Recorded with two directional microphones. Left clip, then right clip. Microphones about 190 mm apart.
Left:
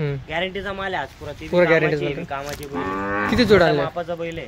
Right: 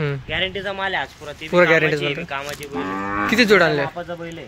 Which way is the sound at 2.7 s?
35° right (ahead or behind).